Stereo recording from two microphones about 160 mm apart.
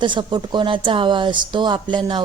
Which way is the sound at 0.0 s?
30° right (ahead or behind).